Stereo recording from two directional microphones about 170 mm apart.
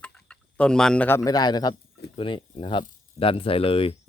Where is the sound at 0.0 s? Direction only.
5° left (ahead or behind).